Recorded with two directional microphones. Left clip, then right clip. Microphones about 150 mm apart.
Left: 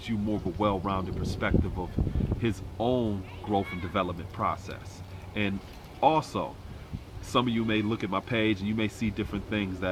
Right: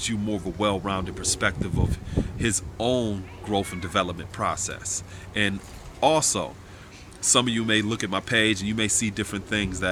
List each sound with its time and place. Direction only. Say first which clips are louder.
0.0 s speech: right 3 dB; 15° right (ahead or behind)